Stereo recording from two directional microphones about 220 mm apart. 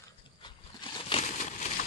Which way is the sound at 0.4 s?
20° left (ahead or behind).